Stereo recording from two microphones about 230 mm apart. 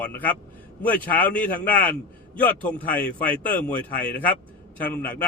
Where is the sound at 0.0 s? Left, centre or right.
Centre.